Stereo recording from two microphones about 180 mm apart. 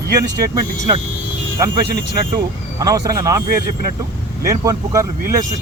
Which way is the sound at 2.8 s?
20° right (ahead or behind).